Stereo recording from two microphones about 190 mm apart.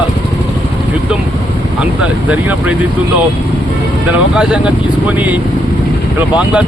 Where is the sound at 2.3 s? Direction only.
5° right (ahead or behind).